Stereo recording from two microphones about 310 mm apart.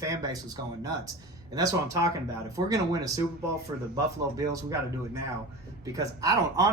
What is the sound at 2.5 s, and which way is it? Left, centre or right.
Speech, centre.